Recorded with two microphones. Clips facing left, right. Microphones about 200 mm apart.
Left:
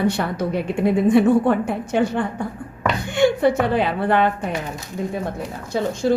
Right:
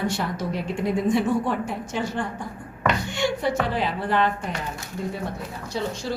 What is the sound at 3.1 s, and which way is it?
A woman's voice, 55° left (ahead or behind).